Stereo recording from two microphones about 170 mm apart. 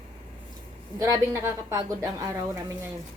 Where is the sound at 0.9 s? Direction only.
20° right (ahead or behind).